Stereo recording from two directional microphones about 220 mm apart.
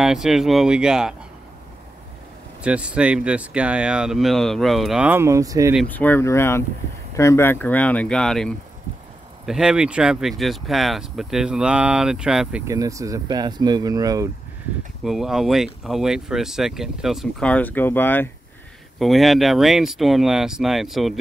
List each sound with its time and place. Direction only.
0.0 s speech: centre (ahead or behind)
2.6 s speech: 5° right (ahead or behind)
5.8 s speech: 5° left (ahead or behind)
12.6 s speech: 15° right (ahead or behind)
15.0 s speech: centre (ahead or behind)